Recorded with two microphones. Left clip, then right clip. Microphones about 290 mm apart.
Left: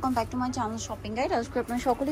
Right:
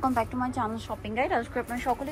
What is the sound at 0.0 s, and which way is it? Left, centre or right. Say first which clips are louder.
A woman's voice: right 1 dB; centre.